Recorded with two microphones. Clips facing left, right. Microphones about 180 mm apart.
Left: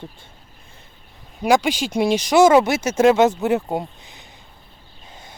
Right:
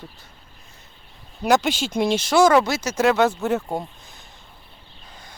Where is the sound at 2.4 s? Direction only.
25° left (ahead or behind).